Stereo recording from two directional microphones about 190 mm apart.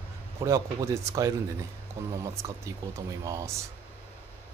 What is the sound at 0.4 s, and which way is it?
Speech, 15° right (ahead or behind).